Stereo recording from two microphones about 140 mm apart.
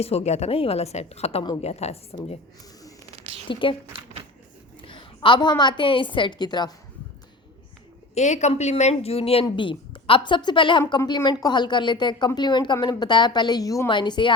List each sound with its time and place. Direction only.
0.0 s a woman's voice: 45° left (ahead or behind)
3.1 s a sound: 50° right (ahead or behind)
3.5 s a woman's voice: 35° left (ahead or behind)
4.8 s a woman's voice: 35° left (ahead or behind)
8.1 s a woman's voice: 55° left (ahead or behind); by 14.3 s 35° left (ahead or behind)